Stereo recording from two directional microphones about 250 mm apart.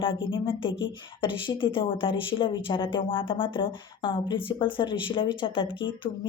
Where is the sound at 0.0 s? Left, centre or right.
Centre.